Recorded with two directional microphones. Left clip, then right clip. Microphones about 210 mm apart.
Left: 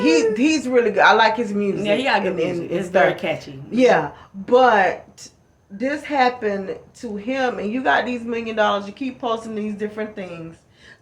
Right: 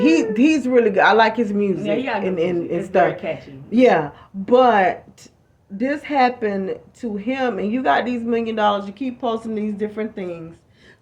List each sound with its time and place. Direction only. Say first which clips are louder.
0.0 s speech: even; 45° right (ahead or behind)
1.8 s speech: left 3 dB; 30° left (ahead or behind)
2.2 s speech: right 1 dB; 50° right (ahead or behind)
3.2 s speech: left 2 dB; 30° left (ahead or behind)
3.7 s speech: right 1 dB; 45° right (ahead or behind)